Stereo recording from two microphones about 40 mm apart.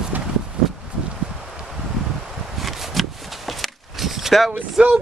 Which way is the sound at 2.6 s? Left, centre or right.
Centre.